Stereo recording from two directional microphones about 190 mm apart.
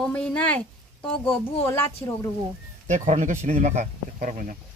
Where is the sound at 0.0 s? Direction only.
5° left (ahead or behind).